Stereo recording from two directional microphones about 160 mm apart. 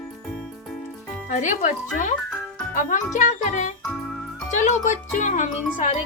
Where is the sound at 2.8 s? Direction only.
50° left (ahead or behind).